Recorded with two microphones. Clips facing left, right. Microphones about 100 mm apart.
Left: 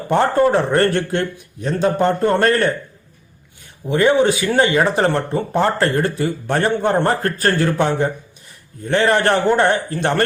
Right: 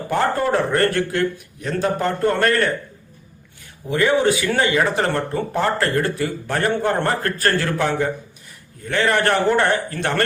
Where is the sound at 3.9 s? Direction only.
25° left (ahead or behind).